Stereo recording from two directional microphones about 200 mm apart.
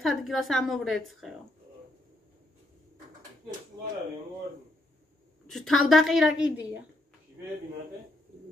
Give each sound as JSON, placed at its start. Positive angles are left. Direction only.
{"t": 0.0, "sound": "a woman's voice", "side_deg": 0}
{"t": 3.8, "sound": "a sound", "side_deg": -20}
{"t": 5.5, "sound": "a woman's voice", "side_deg": 0}